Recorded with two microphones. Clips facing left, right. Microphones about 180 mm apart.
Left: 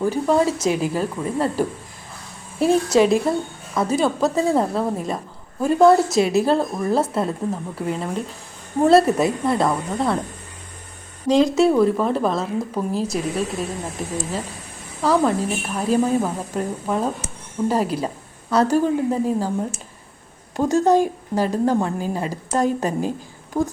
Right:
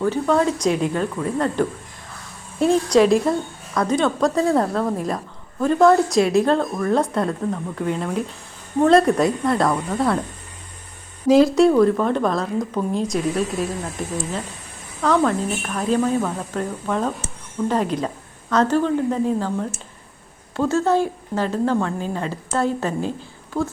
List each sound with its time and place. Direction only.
0.0 s a woman's voice: 10° left (ahead or behind)
11.3 s a woman's voice: 5° right (ahead or behind)
15.0 s a woman's voice: 10° left (ahead or behind)